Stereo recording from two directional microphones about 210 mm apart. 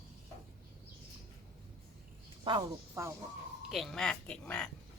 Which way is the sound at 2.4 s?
15° right (ahead or behind).